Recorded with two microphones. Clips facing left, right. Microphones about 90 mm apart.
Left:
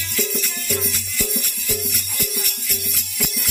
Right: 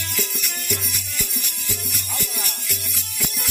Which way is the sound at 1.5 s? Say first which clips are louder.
Left 5 dB; 25° right (ahead or behind).